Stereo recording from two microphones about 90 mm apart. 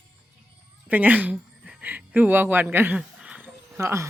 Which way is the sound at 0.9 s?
20° right (ahead or behind).